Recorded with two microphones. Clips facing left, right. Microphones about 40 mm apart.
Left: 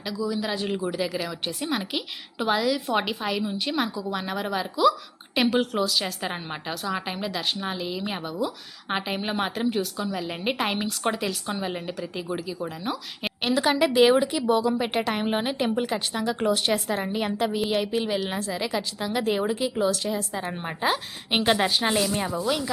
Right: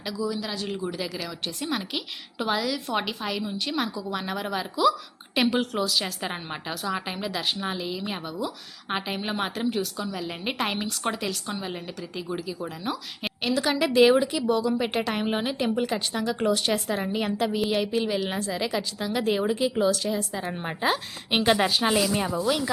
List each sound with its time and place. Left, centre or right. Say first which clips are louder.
0.0 s a woman's voice: left 1 dB; centre
0.3 s a woman's voice: left 3 dB; centre
13.4 s a woman's voice: left 2 dB; centre
13.7 s a woman's voice: even; centre